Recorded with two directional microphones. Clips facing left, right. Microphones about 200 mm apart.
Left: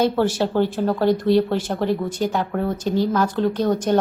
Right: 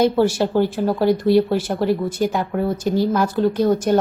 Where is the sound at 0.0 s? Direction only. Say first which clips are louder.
Right 3 dB; 10° right (ahead or behind).